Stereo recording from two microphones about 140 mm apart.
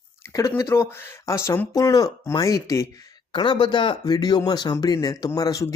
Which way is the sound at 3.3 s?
35° left (ahead or behind).